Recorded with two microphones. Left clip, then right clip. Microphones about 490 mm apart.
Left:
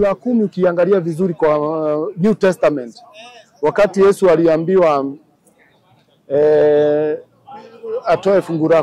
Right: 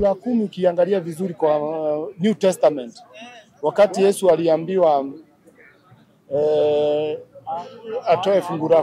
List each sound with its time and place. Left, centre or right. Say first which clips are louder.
0.0 s speech: left 4 dB; left
6.3 s speech: left 6 dB; left